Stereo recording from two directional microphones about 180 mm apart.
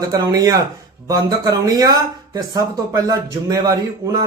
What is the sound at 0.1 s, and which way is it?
Speech, 20° right (ahead or behind).